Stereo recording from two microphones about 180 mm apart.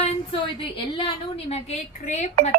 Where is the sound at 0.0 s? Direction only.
30° left (ahead or behind).